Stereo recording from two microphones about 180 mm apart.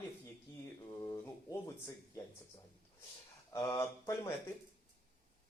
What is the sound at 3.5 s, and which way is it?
Speech, 15° left (ahead or behind).